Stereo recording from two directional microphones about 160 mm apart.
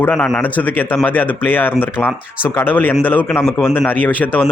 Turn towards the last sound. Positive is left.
turn(degrees=10)  # may be behind; listen again after turning